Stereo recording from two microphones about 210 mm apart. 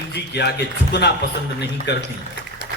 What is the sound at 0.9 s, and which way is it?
A man's voice, 55° left (ahead or behind).